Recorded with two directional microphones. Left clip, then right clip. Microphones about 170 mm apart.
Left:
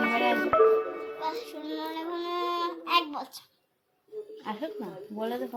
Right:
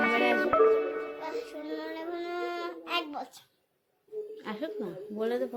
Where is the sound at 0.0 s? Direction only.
Centre (ahead or behind).